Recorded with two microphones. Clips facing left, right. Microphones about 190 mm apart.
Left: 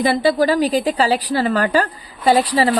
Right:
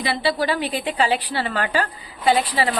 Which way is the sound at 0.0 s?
45° left (ahead or behind).